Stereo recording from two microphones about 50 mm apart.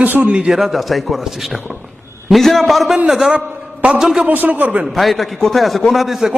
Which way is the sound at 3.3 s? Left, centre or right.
Right.